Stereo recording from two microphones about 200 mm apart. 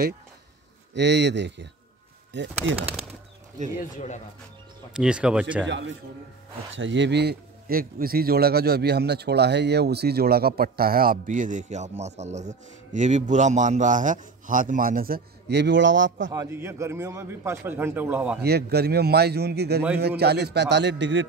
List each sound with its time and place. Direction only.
0.9 s a man's voice: 60° right (ahead or behind)
4.9 s speech: 5° right (ahead or behind)
5.7 s a man's voice: 65° right (ahead or behind)
16.3 s a man's voice: 15° right (ahead or behind)
18.4 s a man's voice: 55° right (ahead or behind)